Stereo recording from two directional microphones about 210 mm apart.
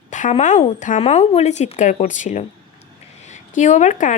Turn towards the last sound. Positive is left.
turn(degrees=35)  # may be behind; listen again after turning